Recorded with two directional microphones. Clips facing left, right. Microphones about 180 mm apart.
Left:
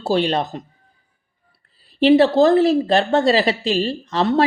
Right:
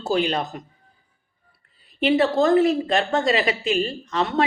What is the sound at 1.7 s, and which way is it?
A woman's voice, 30° left (ahead or behind).